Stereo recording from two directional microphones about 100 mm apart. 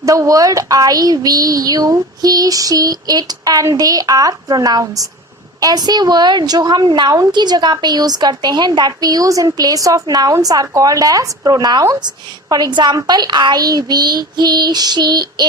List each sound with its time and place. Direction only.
0.0 s a woman's voice: 35° right (ahead or behind)